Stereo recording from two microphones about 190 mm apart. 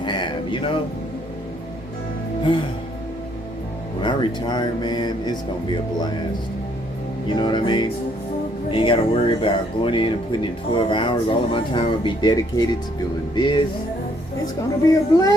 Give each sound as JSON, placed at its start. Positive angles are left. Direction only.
{"t": 0.0, "sound": "a sound", "side_deg": 25}
{"t": 4.0, "sound": "speech", "side_deg": 25}
{"t": 7.3, "sound": "speech", "side_deg": 25}
{"t": 14.8, "sound": "speech", "side_deg": 20}